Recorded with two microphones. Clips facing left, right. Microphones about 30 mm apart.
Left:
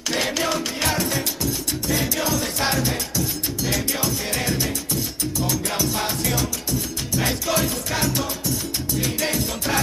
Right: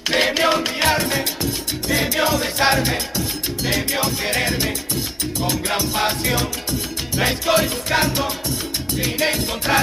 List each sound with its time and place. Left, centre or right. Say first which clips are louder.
0.1 s music: right 6 dB; right